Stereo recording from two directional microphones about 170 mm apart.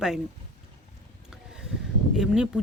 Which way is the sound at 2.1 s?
5° right (ahead or behind).